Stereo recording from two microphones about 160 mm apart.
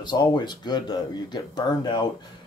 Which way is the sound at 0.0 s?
25° left (ahead or behind).